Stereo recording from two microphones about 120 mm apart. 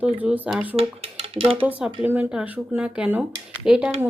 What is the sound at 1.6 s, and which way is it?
Speech, 10° right (ahead or behind).